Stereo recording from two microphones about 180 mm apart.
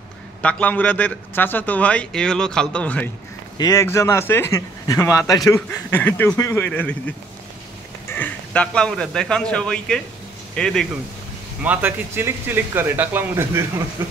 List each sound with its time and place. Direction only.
0.4 s a man's voice: 5° left (ahead or behind)
3.5 s a man's voice: 20° left (ahead or behind); by 10.9 s 5° left (ahead or behind)
11.6 s speech: 10° right (ahead or behind)